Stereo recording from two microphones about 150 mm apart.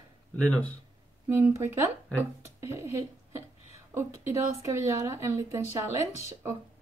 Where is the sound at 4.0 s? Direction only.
20° right (ahead or behind).